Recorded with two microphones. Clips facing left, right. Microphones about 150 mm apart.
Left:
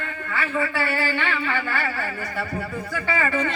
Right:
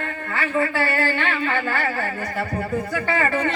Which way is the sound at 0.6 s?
55° right (ahead or behind).